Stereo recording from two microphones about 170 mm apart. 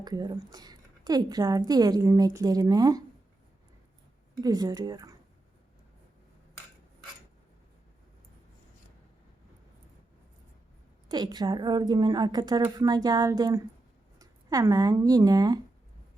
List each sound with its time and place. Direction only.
0.0 s a woman's voice: 25° right (ahead or behind)
4.4 s a woman's voice: 20° right (ahead or behind)
11.1 s a woman's voice: 25° right (ahead or behind)